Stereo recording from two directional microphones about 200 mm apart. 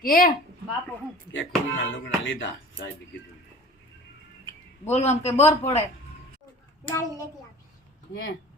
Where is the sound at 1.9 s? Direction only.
70° left (ahead or behind).